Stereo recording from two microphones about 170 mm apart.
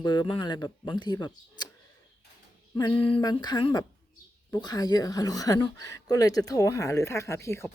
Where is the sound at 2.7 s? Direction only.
25° left (ahead or behind).